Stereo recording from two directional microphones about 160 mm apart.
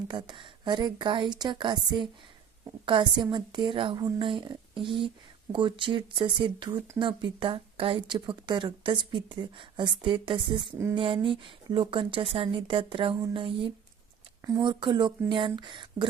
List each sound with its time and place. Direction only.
0.1 s a woman's voice: 30° right (ahead or behind)
6.7 s speech: 15° right (ahead or behind)
7.0 s a woman's voice: 30° right (ahead or behind)